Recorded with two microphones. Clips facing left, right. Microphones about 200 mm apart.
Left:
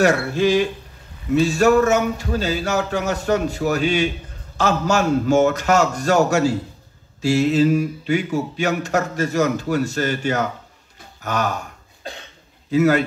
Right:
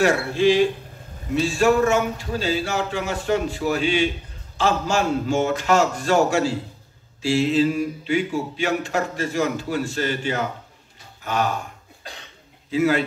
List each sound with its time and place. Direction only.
0.0 s speech: 40° left (ahead or behind)
12.7 s speech: 45° left (ahead or behind)